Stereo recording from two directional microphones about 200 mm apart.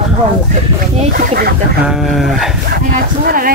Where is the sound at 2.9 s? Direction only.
45° right (ahead or behind).